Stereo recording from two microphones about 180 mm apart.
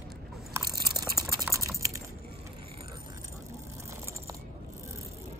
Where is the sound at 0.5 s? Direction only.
20° right (ahead or behind).